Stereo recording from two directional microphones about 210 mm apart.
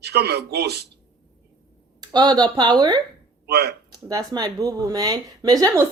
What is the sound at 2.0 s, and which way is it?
Speech, 20° right (ahead or behind).